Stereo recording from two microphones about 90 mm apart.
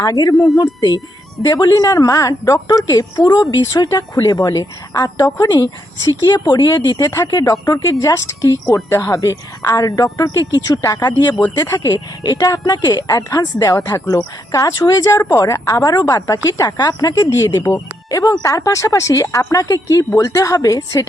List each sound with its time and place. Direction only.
0.0 s a woman's voice: 45° left (ahead or behind)